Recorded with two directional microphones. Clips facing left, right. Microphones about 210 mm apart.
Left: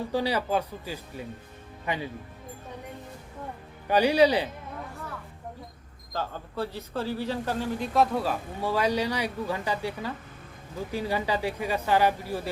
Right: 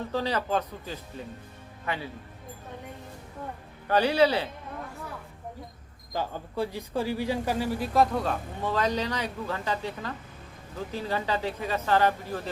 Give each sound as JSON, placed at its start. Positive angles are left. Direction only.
{"t": 0.0, "sound": "speech", "side_deg": 10}
{"t": 3.8, "sound": "speech", "side_deg": 15}
{"t": 6.1, "sound": "speech", "side_deg": -15}